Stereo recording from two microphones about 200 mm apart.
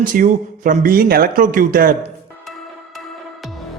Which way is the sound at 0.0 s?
40° right (ahead or behind).